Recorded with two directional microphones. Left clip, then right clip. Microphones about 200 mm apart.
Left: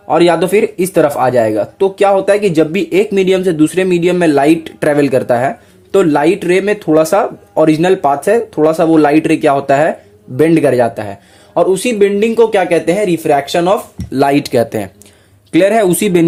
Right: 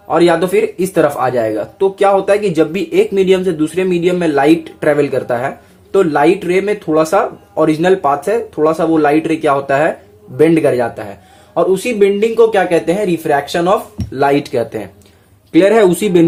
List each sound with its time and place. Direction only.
0.1 s speech: 40° left (ahead or behind)